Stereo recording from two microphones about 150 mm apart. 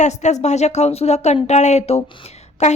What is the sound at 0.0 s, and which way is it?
A woman's voice, 50° left (ahead or behind).